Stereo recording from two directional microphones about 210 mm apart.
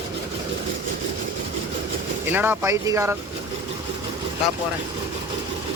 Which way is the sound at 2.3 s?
10° right (ahead or behind).